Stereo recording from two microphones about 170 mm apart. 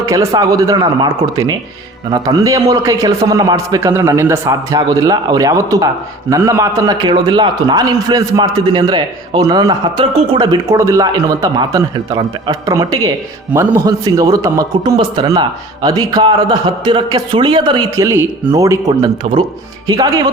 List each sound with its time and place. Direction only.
0.0 s a man's voice: 20° right (ahead or behind)